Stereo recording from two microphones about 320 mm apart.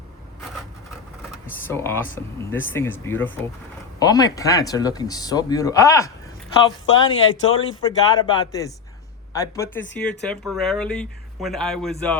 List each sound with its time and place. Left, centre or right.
1.3 s a sound: centre
2.5 s speech: centre
6.8 s speech: left
7.8 s speech: centre